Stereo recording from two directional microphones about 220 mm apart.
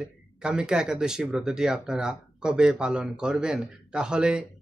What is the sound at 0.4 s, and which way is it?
Speech, 5° right (ahead or behind).